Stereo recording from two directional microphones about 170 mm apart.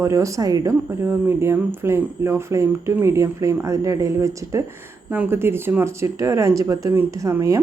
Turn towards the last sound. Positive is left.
turn(degrees=-20)  # may be behind; listen again after turning